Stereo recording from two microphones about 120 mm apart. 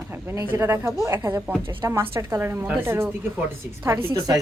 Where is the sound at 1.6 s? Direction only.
45° right (ahead or behind).